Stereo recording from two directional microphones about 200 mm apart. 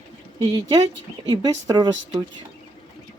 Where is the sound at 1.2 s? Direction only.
20° right (ahead or behind).